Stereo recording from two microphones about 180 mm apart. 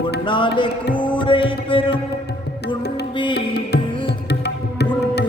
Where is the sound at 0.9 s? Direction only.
25° left (ahead or behind).